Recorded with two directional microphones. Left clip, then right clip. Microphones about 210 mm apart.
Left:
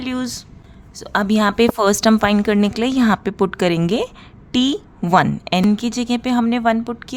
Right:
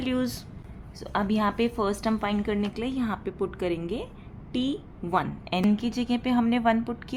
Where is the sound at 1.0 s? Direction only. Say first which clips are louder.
Left 9 dB; 35° left (ahead or behind).